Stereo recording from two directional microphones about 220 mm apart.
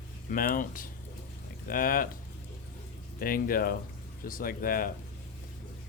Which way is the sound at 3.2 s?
40° left (ahead or behind).